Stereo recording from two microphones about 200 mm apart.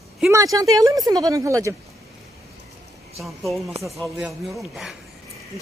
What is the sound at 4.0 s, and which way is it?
Speech, centre (ahead or behind).